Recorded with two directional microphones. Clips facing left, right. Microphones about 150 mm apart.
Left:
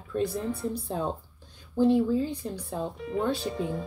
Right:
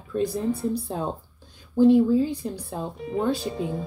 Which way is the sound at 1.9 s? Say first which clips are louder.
Right 6 dB; 10° right (ahead or behind).